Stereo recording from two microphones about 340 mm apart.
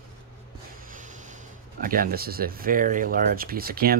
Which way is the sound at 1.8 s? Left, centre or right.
Right.